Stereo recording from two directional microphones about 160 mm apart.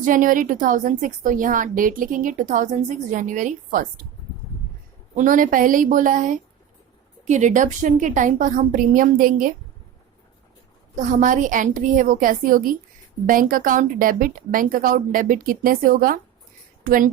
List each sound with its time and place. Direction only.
0.0 s a woman's voice: 55° right (ahead or behind)
5.1 s a woman's voice: 55° right (ahead or behind)
10.9 s a woman's voice: 50° right (ahead or behind)